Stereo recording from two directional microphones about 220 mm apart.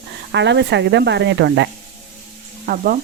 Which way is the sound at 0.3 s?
55° right (ahead or behind).